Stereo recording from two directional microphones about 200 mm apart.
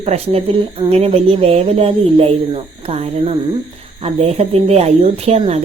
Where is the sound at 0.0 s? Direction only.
30° right (ahead or behind).